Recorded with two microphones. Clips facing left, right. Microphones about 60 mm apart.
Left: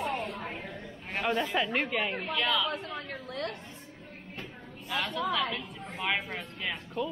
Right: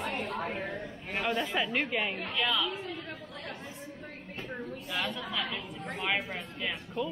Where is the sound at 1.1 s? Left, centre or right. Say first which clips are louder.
Left 2 dB; centre.